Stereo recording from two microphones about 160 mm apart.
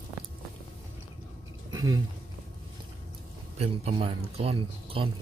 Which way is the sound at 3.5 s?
35° right (ahead or behind).